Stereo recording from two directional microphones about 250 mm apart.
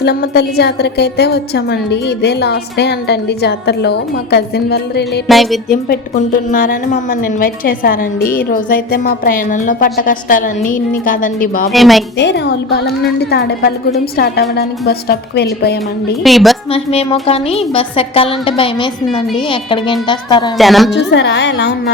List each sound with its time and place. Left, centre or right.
0.0 s a woman's voice: left
5.3 s speech: centre
5.9 s a woman's voice: left
11.7 s speech: centre
12.1 s a woman's voice: left
16.2 s speech: centre
16.7 s a woman's voice: left
20.6 s speech: centre
20.9 s speech: left